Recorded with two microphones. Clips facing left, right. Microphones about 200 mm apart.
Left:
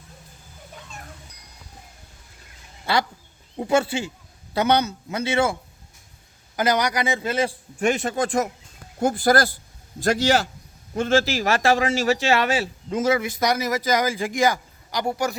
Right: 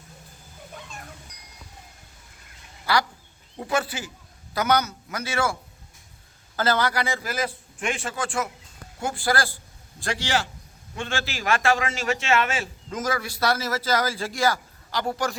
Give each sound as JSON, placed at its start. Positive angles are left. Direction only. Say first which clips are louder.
{"t": 2.8, "sound": "a man's voice", "louder": "left 1 dB", "side_deg": 25}
{"t": 6.6, "sound": "a man's voice", "louder": "left 2 dB", "side_deg": 15}
{"t": 7.8, "sound": "a man's voice", "louder": "left 7 dB", "side_deg": 40}